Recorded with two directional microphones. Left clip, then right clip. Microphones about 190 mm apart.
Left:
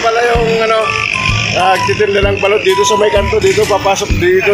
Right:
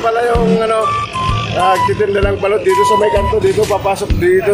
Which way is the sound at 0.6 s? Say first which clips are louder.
Left 2 dB; 5° right (ahead or behind).